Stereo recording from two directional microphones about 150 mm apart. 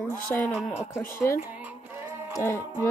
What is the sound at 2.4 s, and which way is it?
Speech, 15° left (ahead or behind).